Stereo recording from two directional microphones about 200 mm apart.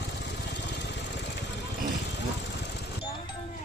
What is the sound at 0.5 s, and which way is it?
Vehicle, 60° left (ahead or behind).